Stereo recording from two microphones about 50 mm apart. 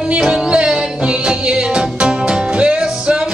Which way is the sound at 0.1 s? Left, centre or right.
Centre.